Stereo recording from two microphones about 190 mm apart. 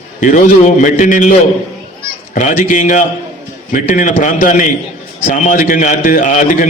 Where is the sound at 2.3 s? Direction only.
40° left (ahead or behind).